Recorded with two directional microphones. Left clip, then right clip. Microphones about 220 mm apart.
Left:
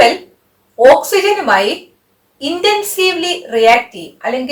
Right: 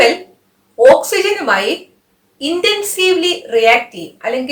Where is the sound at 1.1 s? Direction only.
20° right (ahead or behind).